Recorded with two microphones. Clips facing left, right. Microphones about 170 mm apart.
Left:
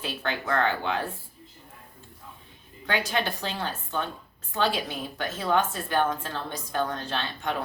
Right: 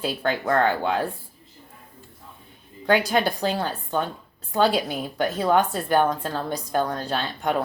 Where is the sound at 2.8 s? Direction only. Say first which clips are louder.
Right 7 dB; 35° right (ahead or behind).